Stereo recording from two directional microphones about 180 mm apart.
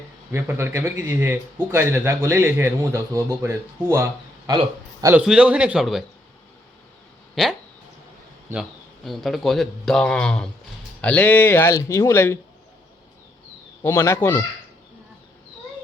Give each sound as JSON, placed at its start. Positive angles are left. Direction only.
{"t": 0.3, "sound": "a man's voice", "side_deg": -15}
{"t": 5.1, "sound": "speech", "side_deg": -5}
{"t": 7.4, "sound": "speech", "side_deg": 0}
{"t": 9.0, "sound": "speech", "side_deg": 0}
{"t": 13.8, "sound": "speech", "side_deg": 15}